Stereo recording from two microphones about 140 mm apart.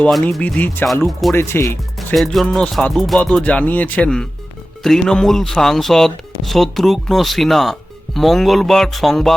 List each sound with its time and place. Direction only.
0.1 s speech: 5° left (ahead or behind)
2.1 s speech: centre (ahead or behind)